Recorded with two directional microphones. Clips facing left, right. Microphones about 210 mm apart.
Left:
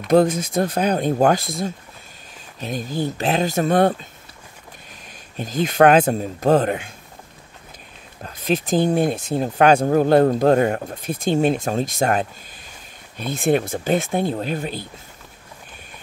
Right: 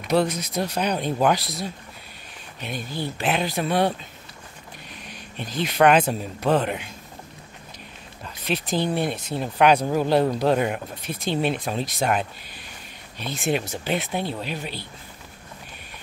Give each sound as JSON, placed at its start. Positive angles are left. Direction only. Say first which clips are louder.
{"t": 0.1, "sound": "speech", "louder": "left 6 dB", "side_deg": 50}
{"t": 5.4, "sound": "speech", "louder": "left 4 dB", "side_deg": 45}
{"t": 8.2, "sound": "speech", "louder": "left 6 dB", "side_deg": 45}